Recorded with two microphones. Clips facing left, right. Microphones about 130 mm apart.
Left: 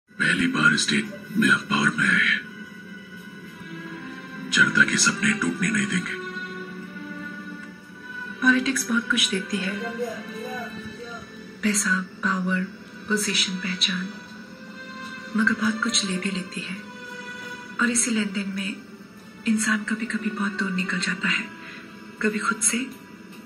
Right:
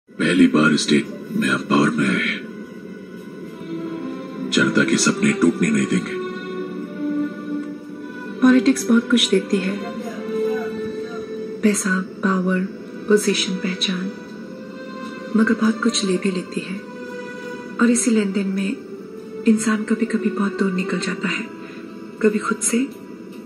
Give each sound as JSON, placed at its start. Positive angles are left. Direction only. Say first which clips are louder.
{"t": 0.2, "sound": "a man's voice", "louder": "right 9 dB", "side_deg": -70}
{"t": 4.6, "sound": "speech", "louder": "right 8 dB", "side_deg": -65}
{"t": 6.2, "sound": "music", "louder": "right 8 dB", "side_deg": -55}
{"t": 8.4, "sound": "speech", "louder": "right 8 dB", "side_deg": -60}
{"t": 11.6, "sound": "speech", "louder": "right 6 dB", "side_deg": -40}
{"t": 15.3, "sound": "speech", "louder": "right 7 dB", "side_deg": -40}
{"t": 17.7, "sound": "speech", "louder": "right 8 dB", "side_deg": -40}
{"t": 19.7, "sound": "speech", "louder": "right 7 dB", "side_deg": -45}